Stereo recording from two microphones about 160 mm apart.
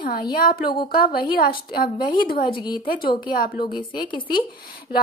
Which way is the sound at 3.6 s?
30° left (ahead or behind).